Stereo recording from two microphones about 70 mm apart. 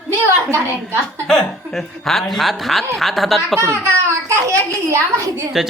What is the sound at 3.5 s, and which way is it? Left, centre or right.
A child's voice, right.